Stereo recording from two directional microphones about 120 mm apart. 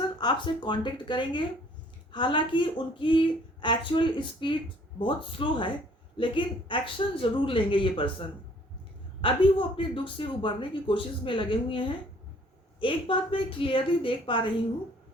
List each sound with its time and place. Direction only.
0.2 s a man's voice: 40° left (ahead or behind)
9.2 s a man's voice: 45° left (ahead or behind)